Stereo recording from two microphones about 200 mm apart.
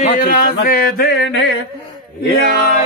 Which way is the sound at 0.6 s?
50° left (ahead or behind).